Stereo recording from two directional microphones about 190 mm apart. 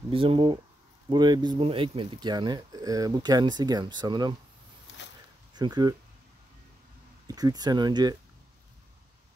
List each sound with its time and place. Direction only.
0.1 s speech: 25° right (ahead or behind)
5.5 s speech: 20° right (ahead or behind)
7.2 s speech: 20° right (ahead or behind)